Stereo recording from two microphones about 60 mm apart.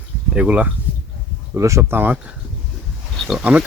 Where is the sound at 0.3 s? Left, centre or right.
Right.